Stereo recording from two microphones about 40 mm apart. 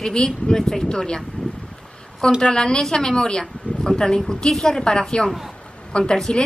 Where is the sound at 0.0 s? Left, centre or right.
Left.